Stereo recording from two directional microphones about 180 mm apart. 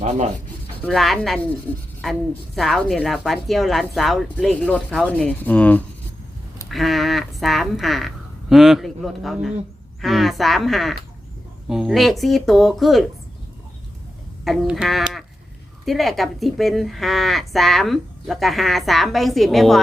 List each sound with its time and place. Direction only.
0.0 s speech: 40° right (ahead or behind)
0.8 s speech: centre (ahead or behind)
2.6 s speech: centre (ahead or behind)
14.4 s speech: centre (ahead or behind)